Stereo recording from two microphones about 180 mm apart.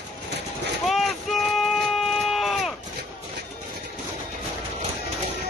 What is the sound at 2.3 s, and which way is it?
Sheep, centre (ahead or behind).